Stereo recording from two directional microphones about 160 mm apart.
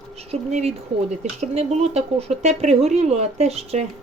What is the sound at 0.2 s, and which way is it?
Speech, 40° right (ahead or behind).